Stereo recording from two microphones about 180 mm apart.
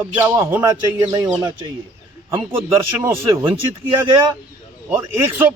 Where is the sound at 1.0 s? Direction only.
20° right (ahead or behind).